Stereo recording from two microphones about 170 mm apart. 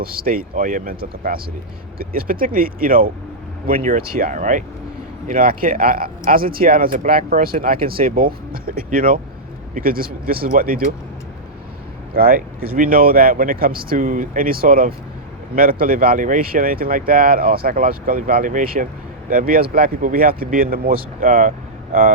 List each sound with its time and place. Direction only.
0.0 s speech: 60° right (ahead or behind)
12.1 s speech: 60° right (ahead or behind)